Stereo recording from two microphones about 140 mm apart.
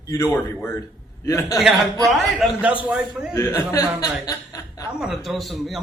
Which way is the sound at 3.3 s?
20° left (ahead or behind).